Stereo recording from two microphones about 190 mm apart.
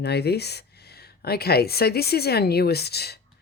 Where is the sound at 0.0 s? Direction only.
60° left (ahead or behind).